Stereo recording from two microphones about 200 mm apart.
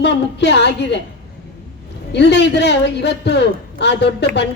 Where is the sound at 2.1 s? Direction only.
60° left (ahead or behind).